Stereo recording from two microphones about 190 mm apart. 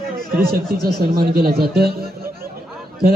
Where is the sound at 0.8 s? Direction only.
55° right (ahead or behind).